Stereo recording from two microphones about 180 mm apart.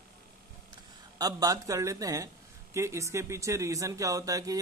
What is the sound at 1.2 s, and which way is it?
A man's voice, 20° right (ahead or behind).